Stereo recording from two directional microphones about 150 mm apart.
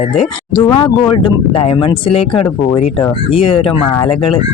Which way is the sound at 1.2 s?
35° left (ahead or behind).